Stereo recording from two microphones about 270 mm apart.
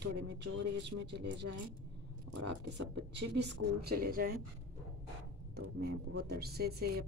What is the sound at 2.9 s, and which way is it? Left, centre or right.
Speech, right.